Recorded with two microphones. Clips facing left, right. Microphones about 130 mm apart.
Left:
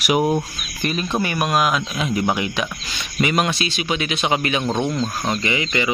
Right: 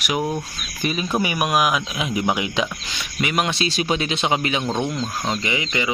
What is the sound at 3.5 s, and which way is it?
Speech, 35° right (ahead or behind).